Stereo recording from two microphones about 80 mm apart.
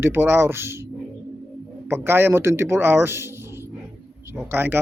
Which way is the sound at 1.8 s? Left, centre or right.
Right.